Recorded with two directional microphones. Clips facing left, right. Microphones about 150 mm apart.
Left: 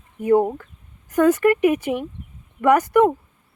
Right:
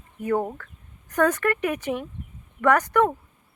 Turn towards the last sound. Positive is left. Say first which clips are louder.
# left 4 dB
turn(degrees=10)  # may be behind; listen again after turning